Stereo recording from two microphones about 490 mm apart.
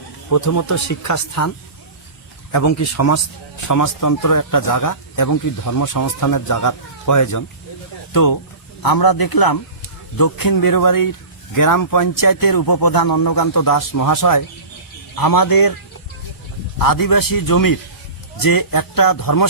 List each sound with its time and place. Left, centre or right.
0.3 s a man's voice: left
2.5 s a man's voice: left
16.7 s a man's voice: left